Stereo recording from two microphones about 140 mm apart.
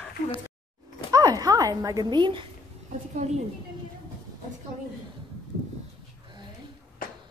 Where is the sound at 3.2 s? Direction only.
55° right (ahead or behind).